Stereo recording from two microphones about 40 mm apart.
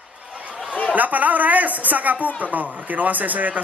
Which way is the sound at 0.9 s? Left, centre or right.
Right.